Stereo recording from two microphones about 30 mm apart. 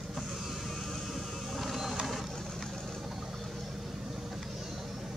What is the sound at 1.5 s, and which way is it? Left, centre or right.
Printer, centre.